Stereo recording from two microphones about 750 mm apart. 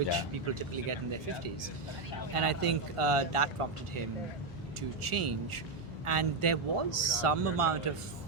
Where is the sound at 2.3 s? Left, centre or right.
Right.